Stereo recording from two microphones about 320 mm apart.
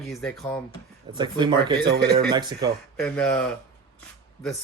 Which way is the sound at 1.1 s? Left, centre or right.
Centre.